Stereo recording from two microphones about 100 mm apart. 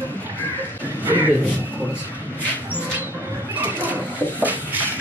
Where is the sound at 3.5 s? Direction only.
15° right (ahead or behind).